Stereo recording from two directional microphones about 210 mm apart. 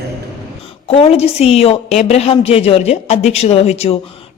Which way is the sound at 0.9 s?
30° left (ahead or behind).